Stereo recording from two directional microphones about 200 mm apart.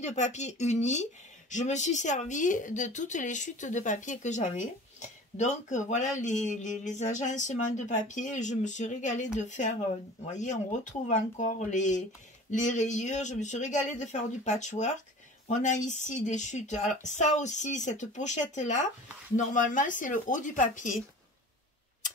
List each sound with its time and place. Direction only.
0.0 s speech: 35° left (ahead or behind)